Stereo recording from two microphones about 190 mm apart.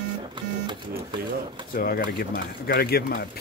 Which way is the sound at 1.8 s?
50° left (ahead or behind).